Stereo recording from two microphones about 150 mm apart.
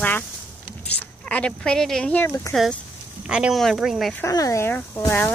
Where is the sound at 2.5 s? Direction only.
Centre (ahead or behind).